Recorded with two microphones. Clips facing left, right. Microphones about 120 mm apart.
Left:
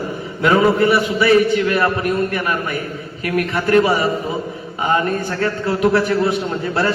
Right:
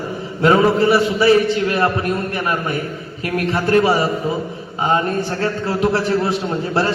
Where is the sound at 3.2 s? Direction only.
30° right (ahead or behind).